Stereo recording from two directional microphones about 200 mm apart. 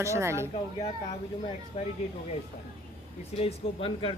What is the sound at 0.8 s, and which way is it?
Speech, 30° left (ahead or behind).